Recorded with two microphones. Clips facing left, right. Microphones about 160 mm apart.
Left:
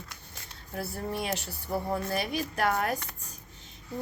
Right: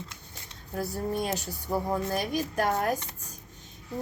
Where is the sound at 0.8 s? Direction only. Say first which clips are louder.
Right 3 dB; 40° right (ahead or behind).